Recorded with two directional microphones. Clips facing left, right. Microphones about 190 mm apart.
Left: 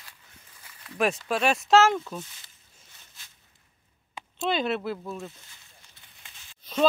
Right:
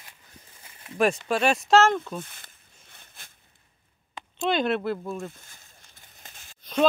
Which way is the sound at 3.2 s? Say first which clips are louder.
Right 5 dB; 55° right (ahead or behind).